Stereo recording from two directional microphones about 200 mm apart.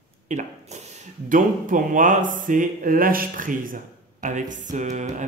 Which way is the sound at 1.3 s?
40° right (ahead or behind).